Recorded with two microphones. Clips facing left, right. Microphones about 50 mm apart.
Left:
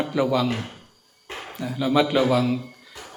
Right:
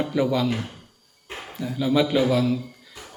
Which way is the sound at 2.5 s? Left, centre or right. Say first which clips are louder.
Even; left.